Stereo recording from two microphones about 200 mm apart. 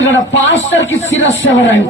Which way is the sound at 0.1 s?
65° left (ahead or behind).